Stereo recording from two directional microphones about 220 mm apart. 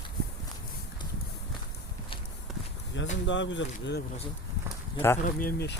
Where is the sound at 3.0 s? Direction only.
55° left (ahead or behind).